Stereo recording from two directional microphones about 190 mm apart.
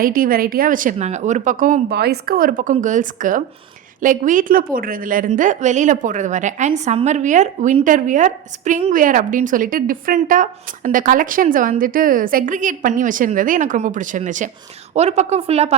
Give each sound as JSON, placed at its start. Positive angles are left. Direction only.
{"t": 0.0, "sound": "a woman's voice", "side_deg": -50}